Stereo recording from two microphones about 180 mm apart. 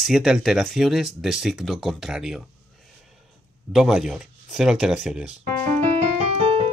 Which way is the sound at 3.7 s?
Centre (ahead or behind).